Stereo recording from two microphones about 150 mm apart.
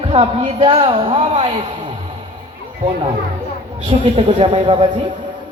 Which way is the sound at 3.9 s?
40° right (ahead or behind).